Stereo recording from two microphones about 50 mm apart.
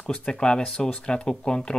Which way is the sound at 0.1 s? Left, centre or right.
Centre.